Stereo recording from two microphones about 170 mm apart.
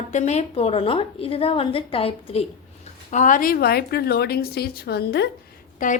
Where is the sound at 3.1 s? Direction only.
50° left (ahead or behind); by 5.2 s 80° left.